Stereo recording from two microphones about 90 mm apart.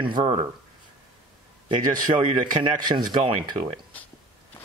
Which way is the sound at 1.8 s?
60° right (ahead or behind).